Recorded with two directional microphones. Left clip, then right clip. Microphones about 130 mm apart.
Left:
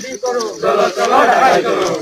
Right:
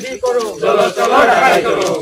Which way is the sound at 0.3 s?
15° right (ahead or behind).